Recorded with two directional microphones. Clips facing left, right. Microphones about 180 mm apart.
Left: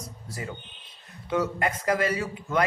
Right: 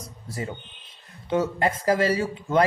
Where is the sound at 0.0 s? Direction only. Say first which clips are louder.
Right 4 dB; 30° right (ahead or behind).